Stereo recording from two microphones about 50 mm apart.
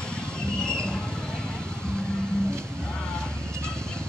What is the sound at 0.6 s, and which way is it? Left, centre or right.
Vehicle, centre.